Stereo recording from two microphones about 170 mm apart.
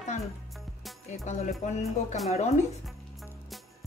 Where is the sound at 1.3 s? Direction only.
40° left (ahead or behind).